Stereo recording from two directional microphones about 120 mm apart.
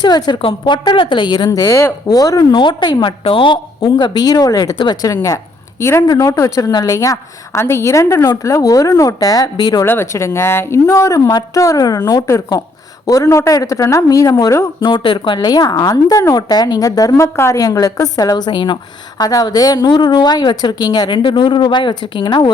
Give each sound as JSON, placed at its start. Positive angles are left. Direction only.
{"t": 0.0, "sound": "a woman's voice", "side_deg": 35}
{"t": 2.5, "sound": "a woman's voice", "side_deg": 40}
{"t": 9.8, "sound": "a woman's voice", "side_deg": 20}
{"t": 14.8, "sound": "a woman's voice", "side_deg": 40}